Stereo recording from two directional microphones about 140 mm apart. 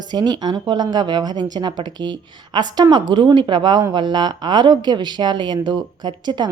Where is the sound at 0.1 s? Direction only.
30° right (ahead or behind).